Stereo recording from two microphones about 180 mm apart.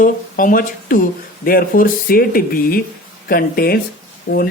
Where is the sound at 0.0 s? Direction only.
50° left (ahead or behind).